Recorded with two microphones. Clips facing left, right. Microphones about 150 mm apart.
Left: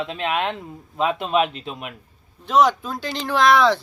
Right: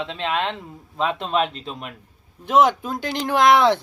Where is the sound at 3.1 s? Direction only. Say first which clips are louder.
Right 3 dB; 15° right (ahead or behind).